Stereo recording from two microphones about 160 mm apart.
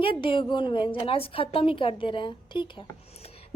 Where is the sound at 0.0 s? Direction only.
35° left (ahead or behind).